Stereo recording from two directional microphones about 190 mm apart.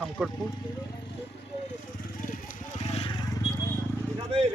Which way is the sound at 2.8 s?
30° left (ahead or behind).